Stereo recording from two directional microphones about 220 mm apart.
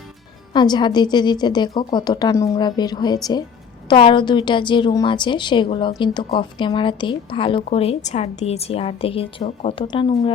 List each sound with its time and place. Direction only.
0.5 s a woman's voice: 20° left (ahead or behind)